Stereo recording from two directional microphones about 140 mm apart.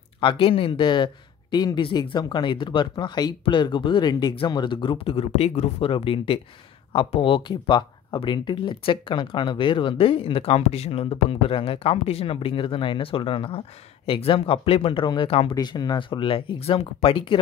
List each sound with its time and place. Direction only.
0.2 s speech: 40° left (ahead or behind)
15.5 s speech: 30° left (ahead or behind)